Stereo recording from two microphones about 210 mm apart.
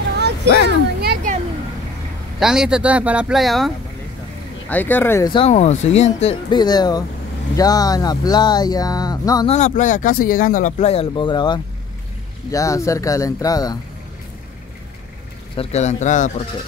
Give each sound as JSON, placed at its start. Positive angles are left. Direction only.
{"t": 0.7, "sound": "a sound", "side_deg": -45}
{"t": 2.4, "sound": "speech", "side_deg": -5}
{"t": 5.3, "sound": "speech", "side_deg": 30}
{"t": 6.6, "sound": "speech", "side_deg": 20}
{"t": 9.5, "sound": "speech", "side_deg": 35}
{"t": 15.5, "sound": "speech", "side_deg": 30}